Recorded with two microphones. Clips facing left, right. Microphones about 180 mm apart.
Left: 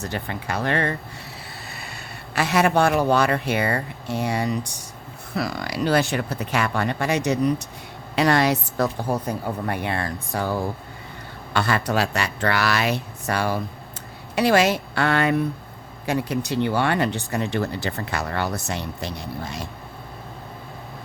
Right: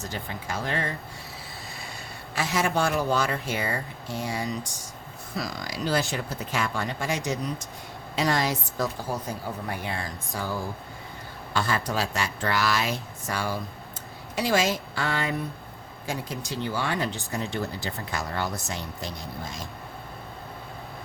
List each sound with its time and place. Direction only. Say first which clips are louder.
0.0 s speech: left 5 dB; 65° left (ahead or behind)